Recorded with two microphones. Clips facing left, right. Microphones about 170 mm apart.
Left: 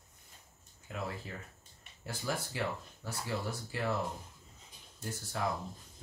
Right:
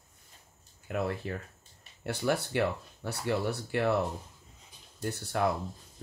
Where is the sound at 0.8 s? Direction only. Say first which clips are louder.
Right 8 dB; 65° right (ahead or behind).